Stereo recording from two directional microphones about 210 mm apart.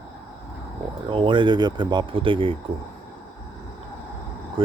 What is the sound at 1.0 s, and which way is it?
Speech, 25° right (ahead or behind).